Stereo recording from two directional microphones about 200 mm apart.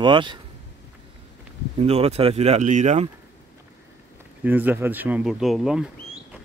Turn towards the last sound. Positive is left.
turn(degrees=-5)  # may be behind; listen again after turning